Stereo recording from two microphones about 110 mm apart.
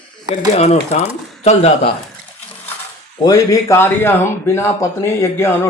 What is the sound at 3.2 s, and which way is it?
Speech, 30° left (ahead or behind).